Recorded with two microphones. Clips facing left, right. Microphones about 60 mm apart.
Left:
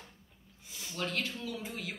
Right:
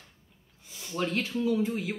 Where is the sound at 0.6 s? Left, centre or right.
Centre.